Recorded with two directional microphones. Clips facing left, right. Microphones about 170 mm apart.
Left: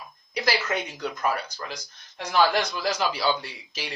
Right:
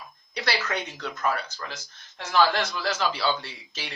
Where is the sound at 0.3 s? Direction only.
10° left (ahead or behind).